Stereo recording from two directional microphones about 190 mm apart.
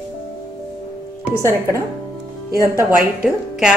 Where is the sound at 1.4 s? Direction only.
15° right (ahead or behind).